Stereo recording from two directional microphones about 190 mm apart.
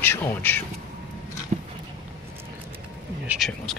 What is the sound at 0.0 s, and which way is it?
Speech, 10° left (ahead or behind).